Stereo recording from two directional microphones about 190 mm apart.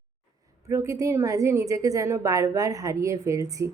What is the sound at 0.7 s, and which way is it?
A woman's voice, 15° right (ahead or behind).